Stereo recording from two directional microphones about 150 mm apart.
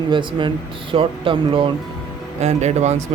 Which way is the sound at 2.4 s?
50° right (ahead or behind).